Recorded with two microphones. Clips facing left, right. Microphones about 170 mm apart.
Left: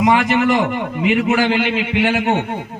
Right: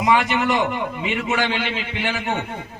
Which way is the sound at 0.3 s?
50° left (ahead or behind).